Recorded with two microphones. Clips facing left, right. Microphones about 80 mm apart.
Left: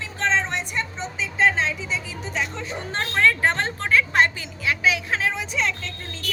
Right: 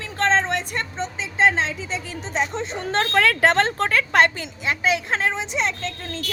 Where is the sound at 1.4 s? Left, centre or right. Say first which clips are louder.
Right 2 dB; right.